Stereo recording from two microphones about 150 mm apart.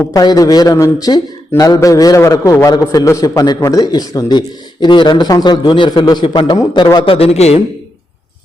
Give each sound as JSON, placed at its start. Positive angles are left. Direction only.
{"t": 0.1, "sound": "a man's voice", "side_deg": 25}